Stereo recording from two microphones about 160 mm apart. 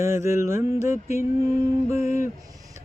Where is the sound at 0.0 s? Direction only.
15° right (ahead or behind).